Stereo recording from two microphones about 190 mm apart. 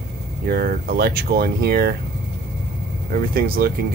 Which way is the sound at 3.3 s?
50° right (ahead or behind).